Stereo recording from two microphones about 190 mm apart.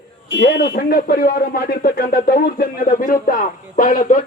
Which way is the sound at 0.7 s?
55° left (ahead or behind).